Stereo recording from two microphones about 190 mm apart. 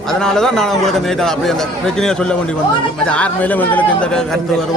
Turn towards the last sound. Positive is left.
turn(degrees=5)  # may be behind; listen again after turning